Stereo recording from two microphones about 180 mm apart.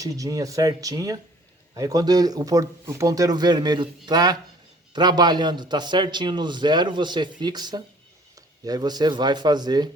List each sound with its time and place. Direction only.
0.0 s a man's voice: 20° right (ahead or behind)